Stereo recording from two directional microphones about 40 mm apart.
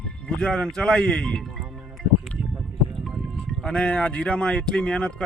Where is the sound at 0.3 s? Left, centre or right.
Left.